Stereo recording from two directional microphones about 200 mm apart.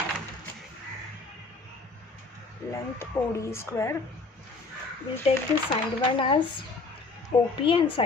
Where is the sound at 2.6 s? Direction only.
15° left (ahead or behind).